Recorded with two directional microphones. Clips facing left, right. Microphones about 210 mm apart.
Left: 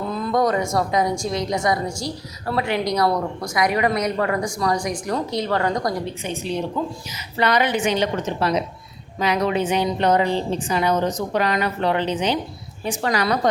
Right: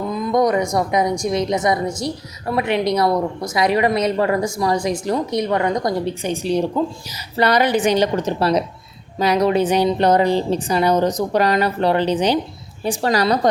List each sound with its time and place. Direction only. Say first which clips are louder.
0.1 s a woman's voice: right 3 dB; 15° right (ahead or behind)
7.1 s a woman's voice: right 2 dB; 40° right (ahead or behind)